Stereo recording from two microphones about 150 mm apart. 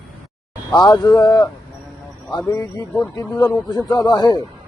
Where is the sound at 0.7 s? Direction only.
30° left (ahead or behind).